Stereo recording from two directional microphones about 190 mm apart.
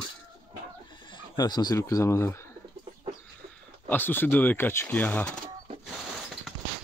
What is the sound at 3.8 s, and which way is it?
Speech, 10° left (ahead or behind).